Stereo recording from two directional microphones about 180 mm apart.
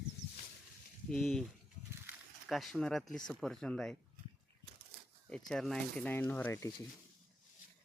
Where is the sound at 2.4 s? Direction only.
Centre (ahead or behind).